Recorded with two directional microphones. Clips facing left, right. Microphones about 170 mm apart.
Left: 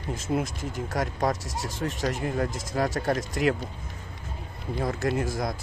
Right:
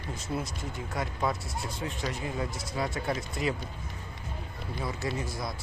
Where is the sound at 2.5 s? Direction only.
90° left.